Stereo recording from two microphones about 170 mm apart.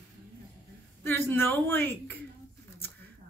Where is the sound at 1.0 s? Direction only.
15° left (ahead or behind).